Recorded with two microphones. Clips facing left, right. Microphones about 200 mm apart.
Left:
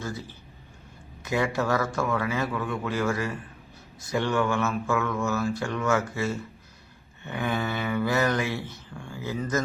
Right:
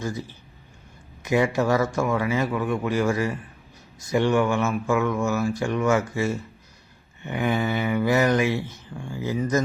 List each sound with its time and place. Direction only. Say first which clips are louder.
0.0 s speech: right 4 dB; 15° right (ahead or behind)